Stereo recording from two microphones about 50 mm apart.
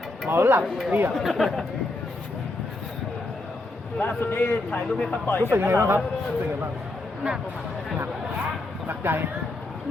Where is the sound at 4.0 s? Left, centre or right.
Left.